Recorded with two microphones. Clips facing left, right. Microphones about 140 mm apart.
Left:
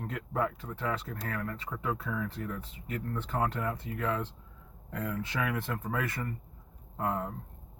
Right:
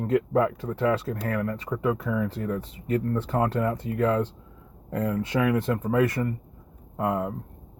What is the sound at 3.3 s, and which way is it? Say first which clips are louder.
Speech: right 6 dB; 50° right (ahead or behind).